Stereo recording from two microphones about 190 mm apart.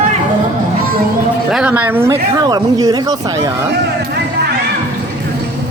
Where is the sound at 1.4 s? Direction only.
5° right (ahead or behind).